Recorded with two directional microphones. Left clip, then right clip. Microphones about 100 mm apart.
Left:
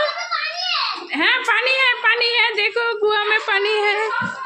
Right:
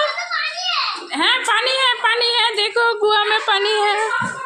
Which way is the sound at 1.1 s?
20° left (ahead or behind).